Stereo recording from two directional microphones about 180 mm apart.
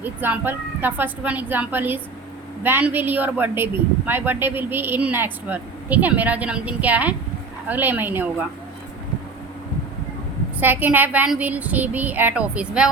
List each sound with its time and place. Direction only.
0.0 s a woman's voice: 10° right (ahead or behind)
10.6 s a woman's voice: 10° right (ahead or behind)